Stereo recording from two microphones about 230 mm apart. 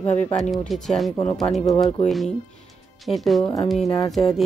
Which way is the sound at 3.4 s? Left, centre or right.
Left.